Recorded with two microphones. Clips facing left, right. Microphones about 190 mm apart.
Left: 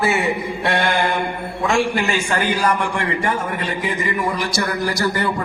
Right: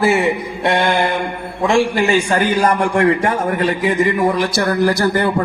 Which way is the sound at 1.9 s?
40° right (ahead or behind).